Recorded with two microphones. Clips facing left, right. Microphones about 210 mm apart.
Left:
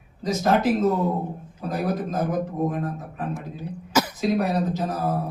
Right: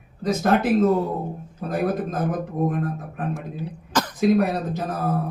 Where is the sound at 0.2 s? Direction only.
55° right (ahead or behind).